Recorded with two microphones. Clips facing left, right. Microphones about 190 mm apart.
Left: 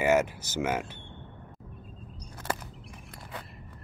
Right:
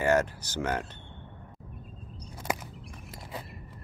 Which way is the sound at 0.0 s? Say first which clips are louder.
Left 1 dB; 10° left (ahead or behind).